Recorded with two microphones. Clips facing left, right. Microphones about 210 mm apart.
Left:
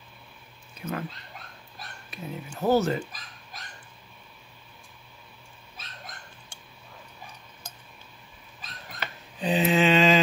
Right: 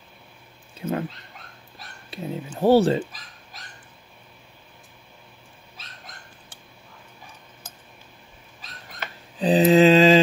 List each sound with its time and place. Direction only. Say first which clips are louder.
0.7 s speech: right 6 dB; 30° right (ahead or behind)
2.0 s speech: right 6 dB; 30° right (ahead or behind)
9.4 s mantra: right 8 dB; 35° right (ahead or behind)